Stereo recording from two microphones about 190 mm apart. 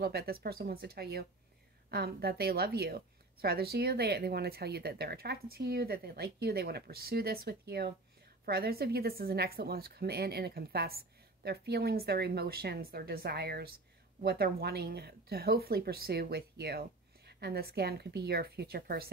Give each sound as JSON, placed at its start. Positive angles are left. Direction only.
{"t": 0.0, "sound": "a woman's voice", "side_deg": -55}